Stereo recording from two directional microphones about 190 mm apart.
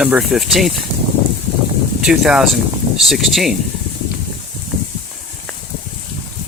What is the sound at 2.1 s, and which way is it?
Speech, 5° right (ahead or behind).